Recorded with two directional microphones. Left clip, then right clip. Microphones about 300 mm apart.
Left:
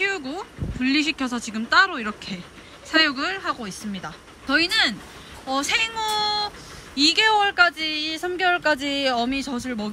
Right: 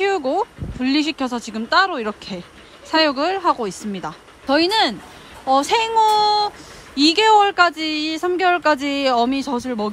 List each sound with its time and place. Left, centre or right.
0.3 s speech: centre